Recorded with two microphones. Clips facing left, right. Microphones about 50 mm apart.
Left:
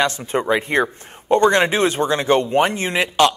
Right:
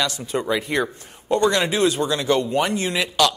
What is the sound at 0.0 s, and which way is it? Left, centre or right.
Speech, left.